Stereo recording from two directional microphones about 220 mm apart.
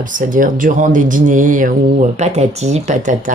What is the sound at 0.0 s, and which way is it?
Speech, 35° right (ahead or behind).